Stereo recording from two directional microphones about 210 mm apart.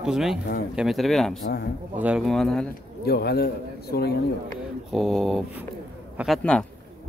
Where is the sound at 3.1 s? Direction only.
50° left (ahead or behind).